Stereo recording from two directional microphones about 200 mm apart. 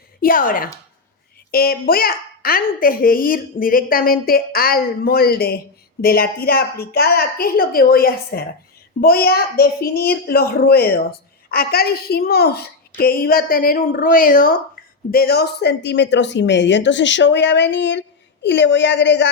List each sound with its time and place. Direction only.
0.2 s a woman's voice: 45° left (ahead or behind); by 19.3 s 60° left (ahead or behind)